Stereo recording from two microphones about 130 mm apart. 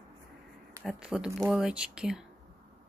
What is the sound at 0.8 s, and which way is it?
Speech, 5° right (ahead or behind).